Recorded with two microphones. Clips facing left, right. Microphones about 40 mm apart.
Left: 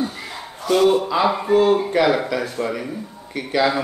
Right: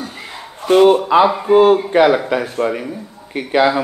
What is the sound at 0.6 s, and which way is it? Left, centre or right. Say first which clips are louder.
A man's voice: right 6 dB; right.